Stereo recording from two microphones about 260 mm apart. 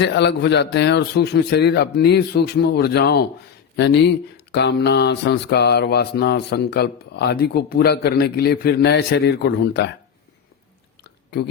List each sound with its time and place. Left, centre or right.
0.0 s mantra: left
3.8 s speech: left
4.5 s mantra: left
11.0 s chewing: left